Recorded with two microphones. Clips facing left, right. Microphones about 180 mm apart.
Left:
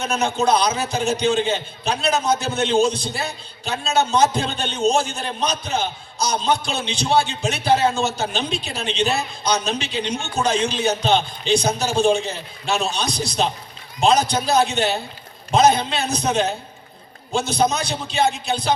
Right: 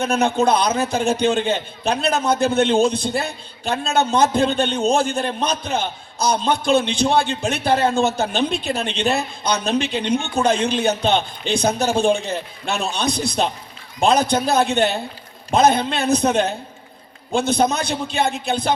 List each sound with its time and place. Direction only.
0.0 s a man's voice: 55° right (ahead or behind)